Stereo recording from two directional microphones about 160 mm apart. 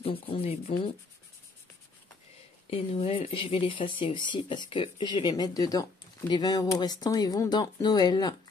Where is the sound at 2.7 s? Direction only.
35° left (ahead or behind).